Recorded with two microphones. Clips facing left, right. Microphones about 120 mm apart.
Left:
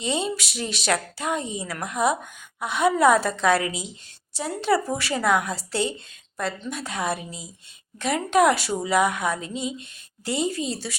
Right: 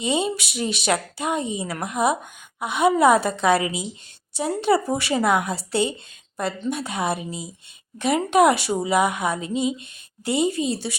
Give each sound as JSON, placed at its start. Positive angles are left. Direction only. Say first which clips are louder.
{"t": 0.0, "sound": "a woman's voice", "louder": "right 3 dB", "side_deg": -15}